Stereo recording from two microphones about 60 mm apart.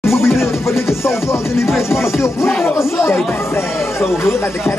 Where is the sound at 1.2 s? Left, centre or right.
Left.